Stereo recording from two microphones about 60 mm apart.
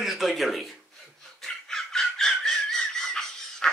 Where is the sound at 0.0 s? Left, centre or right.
Centre.